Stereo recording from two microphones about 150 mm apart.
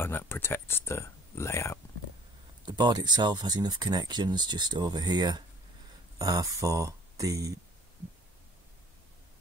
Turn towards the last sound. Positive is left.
turn(degrees=-20)  # may be behind; listen again after turning